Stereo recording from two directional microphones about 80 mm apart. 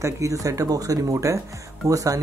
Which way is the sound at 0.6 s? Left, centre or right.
Right.